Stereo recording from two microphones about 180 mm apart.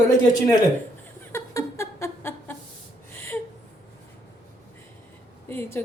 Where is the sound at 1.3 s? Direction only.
15° left (ahead or behind).